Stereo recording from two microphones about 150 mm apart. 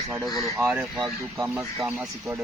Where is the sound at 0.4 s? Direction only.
20° right (ahead or behind).